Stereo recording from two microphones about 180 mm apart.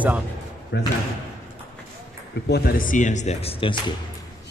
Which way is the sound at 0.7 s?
75° left (ahead or behind).